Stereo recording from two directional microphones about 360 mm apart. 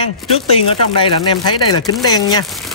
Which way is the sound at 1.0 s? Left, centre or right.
Centre.